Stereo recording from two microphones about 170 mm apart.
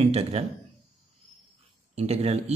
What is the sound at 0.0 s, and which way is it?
Speech, 40° right (ahead or behind).